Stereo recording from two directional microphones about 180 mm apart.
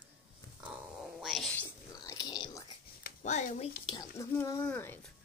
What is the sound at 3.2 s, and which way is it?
Speech, 40° left (ahead or behind).